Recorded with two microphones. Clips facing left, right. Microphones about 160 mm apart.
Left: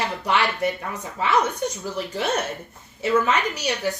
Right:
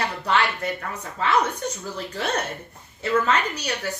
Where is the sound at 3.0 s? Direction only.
10° left (ahead or behind).